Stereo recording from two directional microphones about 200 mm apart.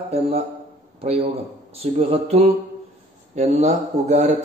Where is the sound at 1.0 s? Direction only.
30° right (ahead or behind).